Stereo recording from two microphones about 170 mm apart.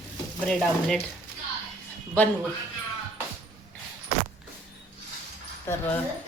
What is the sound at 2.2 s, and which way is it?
Speech, 10° left (ahead or behind).